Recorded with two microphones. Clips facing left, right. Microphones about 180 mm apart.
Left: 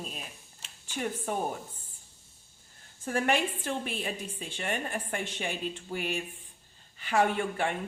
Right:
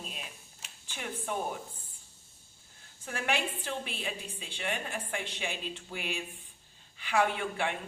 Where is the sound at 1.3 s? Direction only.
45° left (ahead or behind).